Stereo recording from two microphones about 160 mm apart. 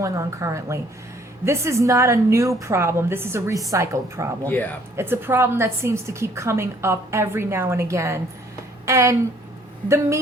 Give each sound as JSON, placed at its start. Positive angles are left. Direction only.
{"t": 0.0, "sound": "a woman's voice", "side_deg": -20}
{"t": 4.4, "sound": "speech", "side_deg": 10}
{"t": 4.9, "sound": "a woman's voice", "side_deg": -15}